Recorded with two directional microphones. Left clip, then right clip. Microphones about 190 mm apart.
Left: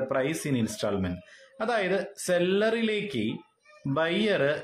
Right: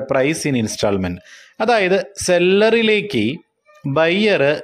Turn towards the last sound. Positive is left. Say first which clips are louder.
# right 10 dB
turn(degrees=-45)  # may be behind; listen again after turning